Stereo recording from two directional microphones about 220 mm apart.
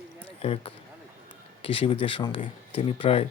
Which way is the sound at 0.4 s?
25° left (ahead or behind).